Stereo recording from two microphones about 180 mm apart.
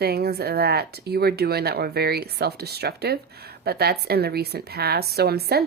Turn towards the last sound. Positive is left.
turn(degrees=-60)  # may be behind; listen again after turning